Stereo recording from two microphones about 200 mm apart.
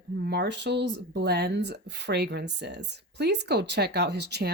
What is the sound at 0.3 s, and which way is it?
Speech, 60° right (ahead or behind).